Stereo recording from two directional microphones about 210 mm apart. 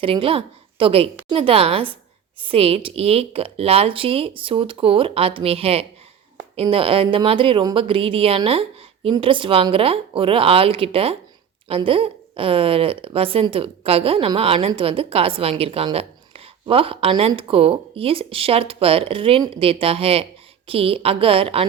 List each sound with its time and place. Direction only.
0.0 s a woman's voice: 25° right (ahead or behind)